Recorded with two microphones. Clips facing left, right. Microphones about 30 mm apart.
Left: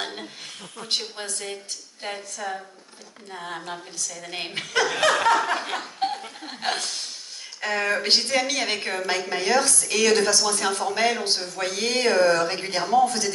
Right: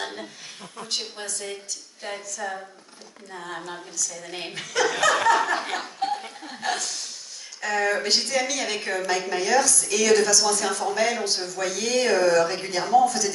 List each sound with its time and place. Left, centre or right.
0.0 s a sound: centre
0.8 s a woman's voice: left
2.4 s a woman's voice: centre
4.6 s a woman's voice: left